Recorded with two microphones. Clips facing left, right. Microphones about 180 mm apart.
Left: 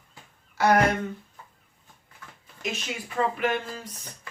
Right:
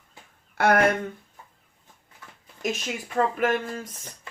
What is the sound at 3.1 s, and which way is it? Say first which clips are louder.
Speech: right 2 dB; 45° right (ahead or behind).